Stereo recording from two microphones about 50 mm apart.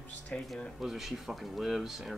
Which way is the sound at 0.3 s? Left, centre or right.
Left.